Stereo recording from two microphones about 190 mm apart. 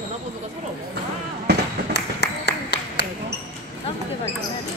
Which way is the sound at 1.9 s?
65° left (ahead or behind).